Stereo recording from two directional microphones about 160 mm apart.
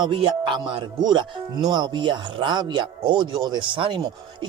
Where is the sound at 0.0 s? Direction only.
30° right (ahead or behind).